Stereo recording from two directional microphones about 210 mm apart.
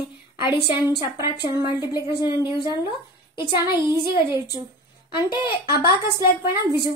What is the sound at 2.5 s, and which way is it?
Speech, 20° right (ahead or behind).